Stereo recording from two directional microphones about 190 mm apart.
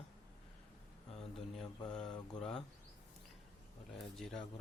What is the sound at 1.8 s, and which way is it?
Mantra, 20° left (ahead or behind).